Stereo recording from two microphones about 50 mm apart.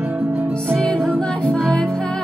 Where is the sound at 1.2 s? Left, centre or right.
Centre.